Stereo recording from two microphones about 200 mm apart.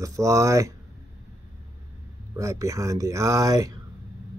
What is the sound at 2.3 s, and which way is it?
Speech, 15° right (ahead or behind).